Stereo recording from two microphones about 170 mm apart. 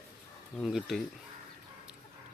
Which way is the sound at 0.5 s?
Centre (ahead or behind).